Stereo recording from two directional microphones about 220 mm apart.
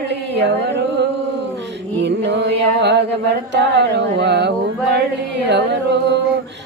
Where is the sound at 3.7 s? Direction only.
50° right (ahead or behind).